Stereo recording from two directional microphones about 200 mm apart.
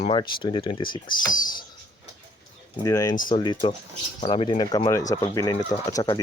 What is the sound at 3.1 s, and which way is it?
Speech, 45° left (ahead or behind).